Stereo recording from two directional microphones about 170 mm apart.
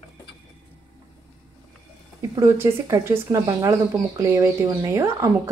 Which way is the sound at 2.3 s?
15° right (ahead or behind).